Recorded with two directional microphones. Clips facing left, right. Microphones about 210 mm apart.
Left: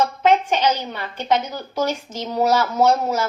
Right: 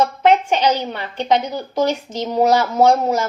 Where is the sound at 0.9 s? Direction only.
15° right (ahead or behind).